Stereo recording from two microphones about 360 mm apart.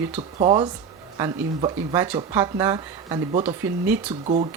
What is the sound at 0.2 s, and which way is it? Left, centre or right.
Speech, centre.